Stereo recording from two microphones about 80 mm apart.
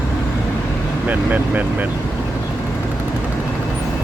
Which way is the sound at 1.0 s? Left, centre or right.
Right.